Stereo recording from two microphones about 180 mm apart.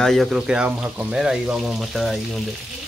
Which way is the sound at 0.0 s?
Centre (ahead or behind).